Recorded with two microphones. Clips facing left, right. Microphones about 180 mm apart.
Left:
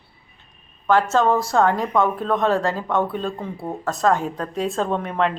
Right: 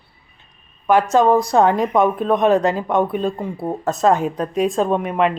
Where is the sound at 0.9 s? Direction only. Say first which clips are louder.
Right 4 dB; 15° right (ahead or behind).